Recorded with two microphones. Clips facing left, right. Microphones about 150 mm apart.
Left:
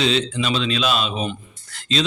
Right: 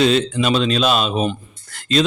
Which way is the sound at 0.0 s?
50° right (ahead or behind).